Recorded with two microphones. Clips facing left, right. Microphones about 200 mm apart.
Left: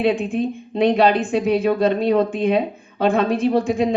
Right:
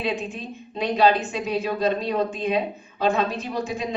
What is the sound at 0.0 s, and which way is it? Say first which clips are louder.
A woman's voice: left 9 dB; 55° left (ahead or behind).